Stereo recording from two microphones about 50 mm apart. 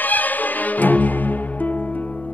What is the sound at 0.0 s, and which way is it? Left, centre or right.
Music, left.